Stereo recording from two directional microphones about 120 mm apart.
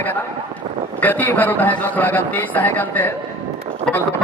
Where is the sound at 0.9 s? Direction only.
15° left (ahead or behind).